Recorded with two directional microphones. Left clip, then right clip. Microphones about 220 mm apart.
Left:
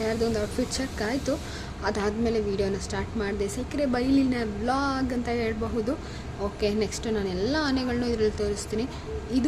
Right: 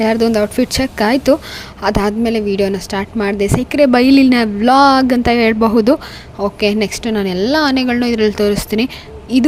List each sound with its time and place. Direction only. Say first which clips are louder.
0.0 s a woman's voice: right 13 dB; 40° right (ahead or behind)